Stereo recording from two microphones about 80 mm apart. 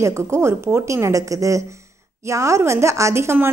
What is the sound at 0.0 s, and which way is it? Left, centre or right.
A woman's voice, right.